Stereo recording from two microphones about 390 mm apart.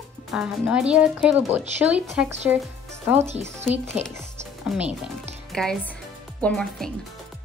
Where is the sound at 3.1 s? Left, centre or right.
Centre.